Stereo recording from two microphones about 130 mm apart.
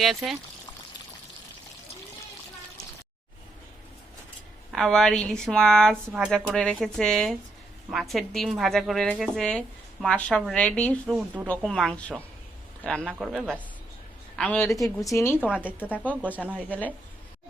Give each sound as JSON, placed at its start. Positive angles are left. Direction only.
{"t": 0.0, "sound": "speech", "side_deg": 0}
{"t": 4.7, "sound": "a woman's voice", "side_deg": 5}
{"t": 13.1, "sound": "speech", "side_deg": -5}
{"t": 14.3, "sound": "a woman's voice", "side_deg": 10}
{"t": 14.7, "sound": "a woman's voice", "side_deg": 25}
{"t": 15.4, "sound": "speech", "side_deg": -10}